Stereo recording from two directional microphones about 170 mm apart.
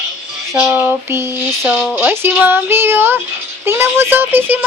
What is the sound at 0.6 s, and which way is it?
A child's voice, 15° right (ahead or behind).